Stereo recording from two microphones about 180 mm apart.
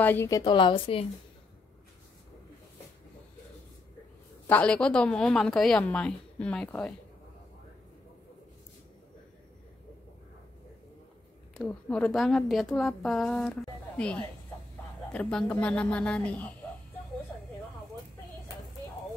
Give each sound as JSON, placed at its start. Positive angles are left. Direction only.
{"t": 0.0, "sound": "speech", "side_deg": 15}
{"t": 0.4, "sound": "a woman's voice", "side_deg": 25}
{"t": 4.5, "sound": "a woman's voice", "side_deg": 5}
{"t": 11.5, "sound": "a woman's voice", "side_deg": 5}